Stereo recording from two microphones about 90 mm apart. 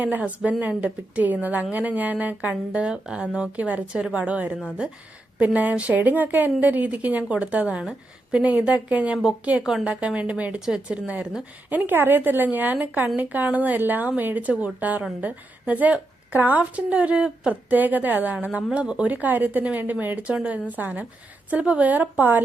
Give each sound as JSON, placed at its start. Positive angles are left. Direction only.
{"t": 0.0, "sound": "speech", "side_deg": -20}